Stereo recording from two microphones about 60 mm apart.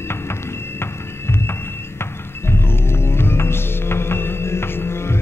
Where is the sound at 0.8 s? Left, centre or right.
Left.